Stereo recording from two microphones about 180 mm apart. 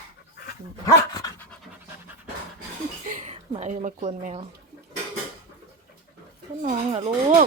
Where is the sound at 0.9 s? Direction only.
20° left (ahead or behind).